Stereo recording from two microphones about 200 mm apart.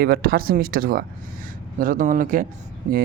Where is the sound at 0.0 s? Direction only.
50° right (ahead or behind).